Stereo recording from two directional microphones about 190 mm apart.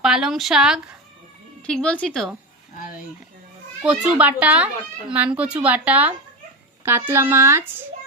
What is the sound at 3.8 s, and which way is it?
A child's voice, 5° right (ahead or behind).